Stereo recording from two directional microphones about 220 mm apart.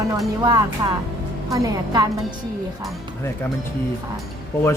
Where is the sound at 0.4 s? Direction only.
15° right (ahead or behind).